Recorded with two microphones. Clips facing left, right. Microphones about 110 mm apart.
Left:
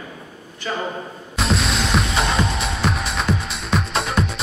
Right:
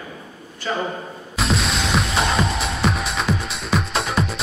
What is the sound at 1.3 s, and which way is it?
Music, centre (ahead or behind).